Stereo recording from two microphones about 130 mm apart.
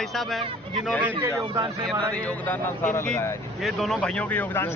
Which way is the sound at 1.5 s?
35° right (ahead or behind).